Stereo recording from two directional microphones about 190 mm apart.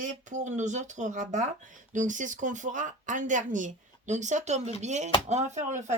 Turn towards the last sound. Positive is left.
turn(degrees=-35)  # may be behind; listen again after turning